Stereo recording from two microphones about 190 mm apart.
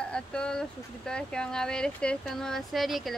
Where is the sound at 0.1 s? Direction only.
5° left (ahead or behind).